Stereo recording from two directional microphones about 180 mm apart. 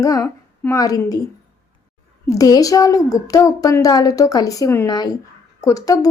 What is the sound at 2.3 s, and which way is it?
A woman's voice, 20° left (ahead or behind).